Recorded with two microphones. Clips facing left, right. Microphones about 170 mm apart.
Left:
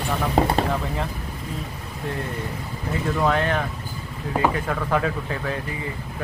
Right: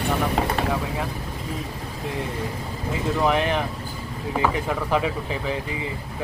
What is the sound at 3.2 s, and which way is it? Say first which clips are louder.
Speech: even; 15° right (ahead or behind).